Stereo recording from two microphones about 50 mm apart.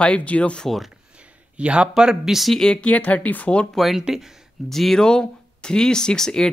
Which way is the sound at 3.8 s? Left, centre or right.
Centre.